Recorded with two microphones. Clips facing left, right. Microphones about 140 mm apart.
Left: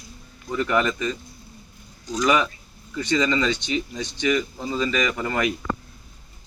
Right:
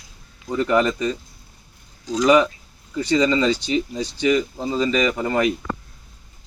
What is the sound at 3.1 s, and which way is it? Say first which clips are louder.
Speech: right 4 dB; 25° right (ahead or behind).